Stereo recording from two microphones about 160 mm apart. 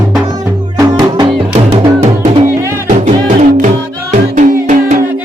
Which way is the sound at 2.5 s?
15° right (ahead or behind).